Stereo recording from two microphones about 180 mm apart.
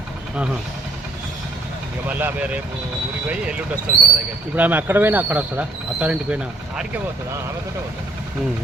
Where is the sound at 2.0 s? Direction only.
10° right (ahead or behind).